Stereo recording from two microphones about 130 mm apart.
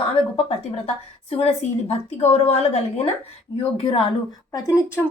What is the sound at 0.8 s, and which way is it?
A woman's voice, 50° left (ahead or behind).